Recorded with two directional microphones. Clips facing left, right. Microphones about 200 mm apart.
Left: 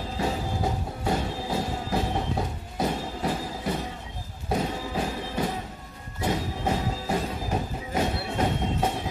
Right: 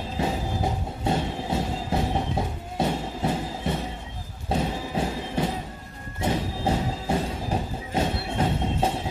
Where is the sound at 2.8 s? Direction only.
25° right (ahead or behind).